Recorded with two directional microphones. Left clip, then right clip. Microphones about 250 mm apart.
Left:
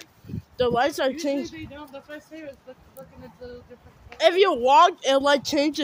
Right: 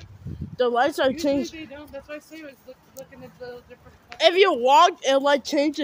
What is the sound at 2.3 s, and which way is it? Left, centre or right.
Speech, right.